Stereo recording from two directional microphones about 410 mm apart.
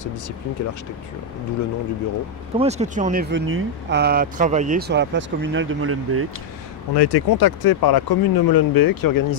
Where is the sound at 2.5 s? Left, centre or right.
Centre; by 6.2 s right.